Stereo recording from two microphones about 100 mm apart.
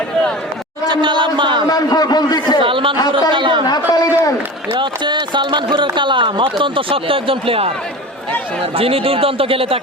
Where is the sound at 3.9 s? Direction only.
40° left (ahead or behind).